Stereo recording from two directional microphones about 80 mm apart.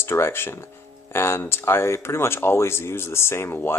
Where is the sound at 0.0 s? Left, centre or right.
Left.